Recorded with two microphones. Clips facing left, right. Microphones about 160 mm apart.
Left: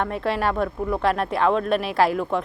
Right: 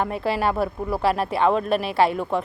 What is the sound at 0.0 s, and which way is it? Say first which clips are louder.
Speech: right 1 dB; 5° right (ahead or behind).